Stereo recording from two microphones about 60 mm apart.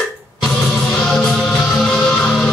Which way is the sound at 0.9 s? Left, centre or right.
Centre.